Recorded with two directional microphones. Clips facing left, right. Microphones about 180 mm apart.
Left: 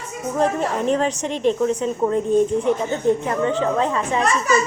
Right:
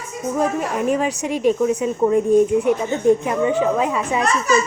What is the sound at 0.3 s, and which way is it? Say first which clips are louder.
A woman's voice: left 1 dB; 10° right (ahead or behind).